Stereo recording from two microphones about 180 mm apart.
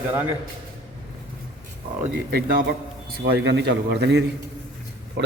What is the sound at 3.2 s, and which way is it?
A man's voice, 75° right (ahead or behind).